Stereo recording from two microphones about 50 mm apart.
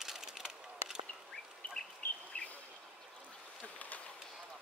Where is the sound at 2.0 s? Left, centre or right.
Left.